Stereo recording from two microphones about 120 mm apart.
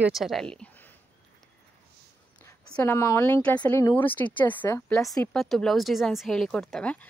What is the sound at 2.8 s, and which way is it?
A woman's voice, 20° left (ahead or behind).